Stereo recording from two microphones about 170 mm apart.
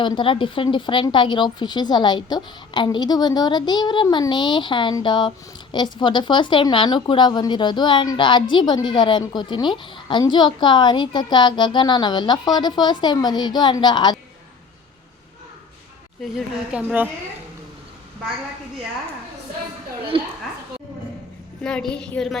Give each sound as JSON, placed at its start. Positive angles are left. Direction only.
{"t": 0.0, "sound": "a woman's voice", "side_deg": 30}
{"t": 16.2, "sound": "a woman's voice", "side_deg": -5}
{"t": 20.1, "sound": "a woman's voice", "side_deg": -30}
{"t": 21.6, "sound": "a woman's voice", "side_deg": 5}